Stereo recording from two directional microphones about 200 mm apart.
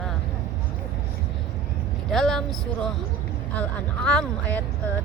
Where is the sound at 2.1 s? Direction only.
Centre (ahead or behind).